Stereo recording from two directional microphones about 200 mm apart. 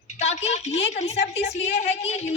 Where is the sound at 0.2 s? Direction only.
35° left (ahead or behind).